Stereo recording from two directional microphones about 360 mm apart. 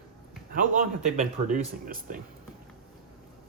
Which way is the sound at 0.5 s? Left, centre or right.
Right.